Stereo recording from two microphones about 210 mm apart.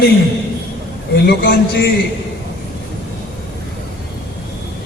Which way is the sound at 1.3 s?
50° left (ahead or behind).